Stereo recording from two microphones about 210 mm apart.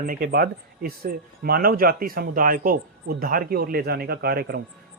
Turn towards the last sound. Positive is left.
turn(degrees=-50)  # may be behind; listen again after turning